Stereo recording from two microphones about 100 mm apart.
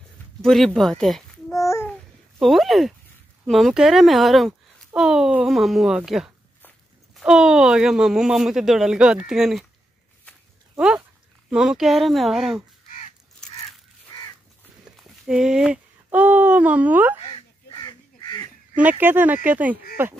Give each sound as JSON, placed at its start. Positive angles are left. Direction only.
{"t": 0.4, "sound": "speech", "side_deg": 5}
{"t": 1.5, "sound": "babbling", "side_deg": 30}
{"t": 2.4, "sound": "speech", "side_deg": 0}
{"t": 10.8, "sound": "speech", "side_deg": -5}
{"t": 15.0, "sound": "speech", "side_deg": -5}
{"t": 17.2, "sound": "crow", "side_deg": 65}
{"t": 17.7, "sound": "crow", "side_deg": 40}
{"t": 18.8, "sound": "speech", "side_deg": -20}